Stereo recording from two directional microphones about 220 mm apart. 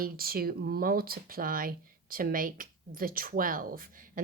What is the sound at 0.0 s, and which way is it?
Speech, 40° right (ahead or behind).